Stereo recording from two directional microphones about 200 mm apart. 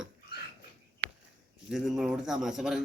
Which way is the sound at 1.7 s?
Centre (ahead or behind).